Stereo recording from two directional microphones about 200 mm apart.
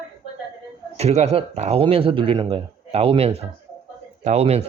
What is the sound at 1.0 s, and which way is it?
Speech, 30° right (ahead or behind).